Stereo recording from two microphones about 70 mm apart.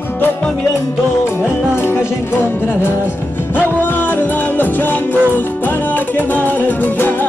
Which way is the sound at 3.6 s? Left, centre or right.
Left.